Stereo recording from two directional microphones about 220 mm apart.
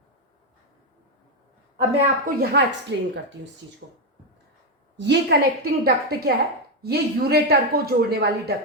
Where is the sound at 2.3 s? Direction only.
50° right (ahead or behind).